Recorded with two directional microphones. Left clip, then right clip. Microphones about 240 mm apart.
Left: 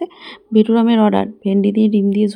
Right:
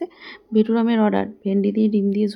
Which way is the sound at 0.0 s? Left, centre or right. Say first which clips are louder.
Left 5 dB; centre.